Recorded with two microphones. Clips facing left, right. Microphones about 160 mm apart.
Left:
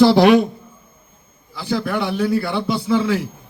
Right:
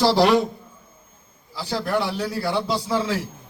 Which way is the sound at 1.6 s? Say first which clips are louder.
Left 3 dB; 55° left (ahead or behind).